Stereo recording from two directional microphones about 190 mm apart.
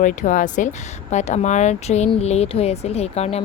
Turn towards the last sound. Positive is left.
turn(degrees=35)  # may be behind; listen again after turning